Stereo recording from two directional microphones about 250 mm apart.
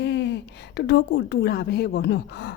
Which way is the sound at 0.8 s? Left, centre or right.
Left.